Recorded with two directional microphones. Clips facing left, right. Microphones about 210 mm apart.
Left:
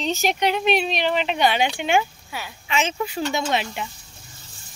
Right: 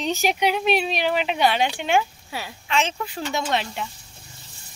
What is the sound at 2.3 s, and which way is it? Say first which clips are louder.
Speech: right 1 dB; 35° right (ahead or behind).